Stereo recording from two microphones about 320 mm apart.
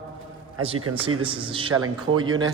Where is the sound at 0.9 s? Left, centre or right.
Right.